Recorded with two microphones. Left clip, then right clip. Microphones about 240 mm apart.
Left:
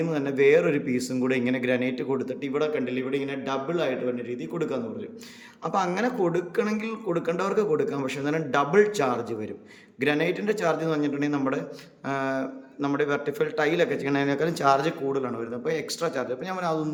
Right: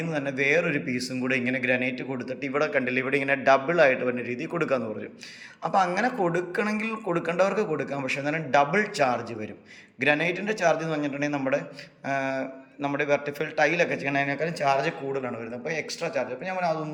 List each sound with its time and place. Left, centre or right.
0.0 s a man's voice: centre